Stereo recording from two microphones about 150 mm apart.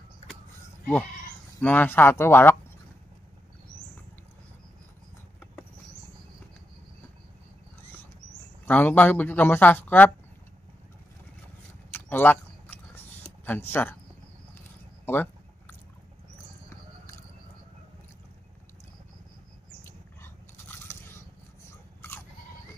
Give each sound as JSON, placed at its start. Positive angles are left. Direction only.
{"t": 1.6, "sound": "speech", "side_deg": 10}
{"t": 8.6, "sound": "speech", "side_deg": 10}
{"t": 11.9, "sound": "chewing", "side_deg": 15}
{"t": 13.5, "sound": "speech", "side_deg": 15}
{"t": 15.0, "sound": "a sound", "side_deg": 15}
{"t": 19.8, "sound": "biting", "side_deg": 15}
{"t": 21.6, "sound": "toothbrush", "side_deg": 15}